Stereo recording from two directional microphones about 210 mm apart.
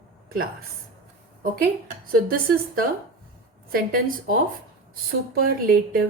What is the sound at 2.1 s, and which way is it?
A woman's voice, 45° right (ahead or behind).